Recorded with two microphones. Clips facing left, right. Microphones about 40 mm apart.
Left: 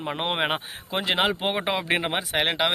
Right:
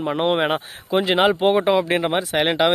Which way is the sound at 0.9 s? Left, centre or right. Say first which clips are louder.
Right 7 dB; centre.